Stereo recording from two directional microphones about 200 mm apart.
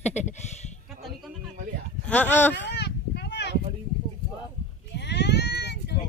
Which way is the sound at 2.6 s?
55° left (ahead or behind).